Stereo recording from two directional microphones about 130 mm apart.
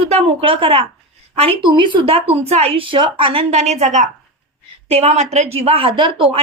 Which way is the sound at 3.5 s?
60° right (ahead or behind).